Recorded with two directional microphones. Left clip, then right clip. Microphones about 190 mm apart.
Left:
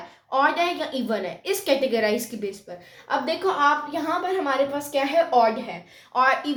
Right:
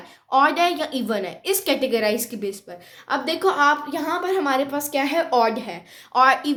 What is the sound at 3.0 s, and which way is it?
A woman's voice, 45° right (ahead or behind).